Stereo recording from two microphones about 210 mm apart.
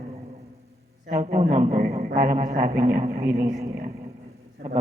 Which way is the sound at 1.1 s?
35° right (ahead or behind).